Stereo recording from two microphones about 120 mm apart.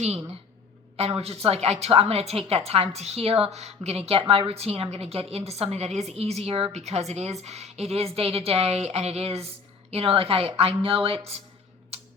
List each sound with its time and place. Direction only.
0.9 s a woman's voice: 55° right (ahead or behind)
6.7 s a woman's voice: 65° right (ahead or behind); by 11.2 s 50° right (ahead or behind)
11.9 s tick-tock: 60° right (ahead or behind)